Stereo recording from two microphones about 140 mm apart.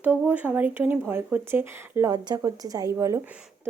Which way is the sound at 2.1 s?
30° right (ahead or behind).